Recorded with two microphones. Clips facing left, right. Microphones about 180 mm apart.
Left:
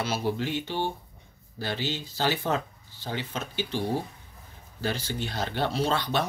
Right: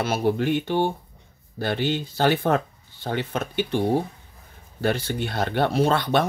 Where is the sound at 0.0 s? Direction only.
55° right (ahead or behind).